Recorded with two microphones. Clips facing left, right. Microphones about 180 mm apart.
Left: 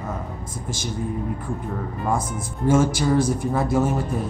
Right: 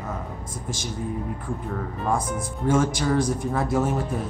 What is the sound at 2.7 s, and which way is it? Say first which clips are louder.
Speech: left 3 dB; 5° left (ahead or behind).